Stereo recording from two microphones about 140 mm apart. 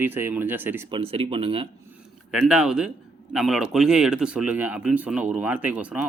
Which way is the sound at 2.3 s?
5° right (ahead or behind).